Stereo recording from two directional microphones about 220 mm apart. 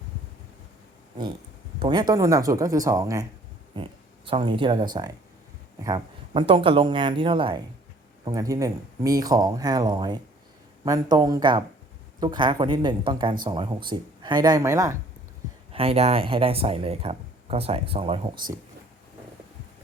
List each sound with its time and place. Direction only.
1.8 s speech: 20° right (ahead or behind)
4.3 s speech: 20° right (ahead or behind)
15.7 s speech: 25° right (ahead or behind)